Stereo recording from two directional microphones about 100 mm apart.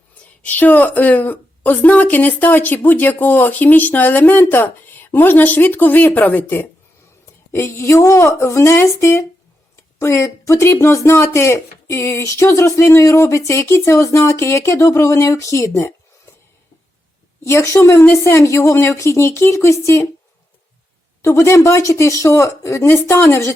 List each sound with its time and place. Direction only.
0.4 s a woman's voice: 15° left (ahead or behind)
17.4 s speech: 30° left (ahead or behind)
21.2 s speech: 25° left (ahead or behind)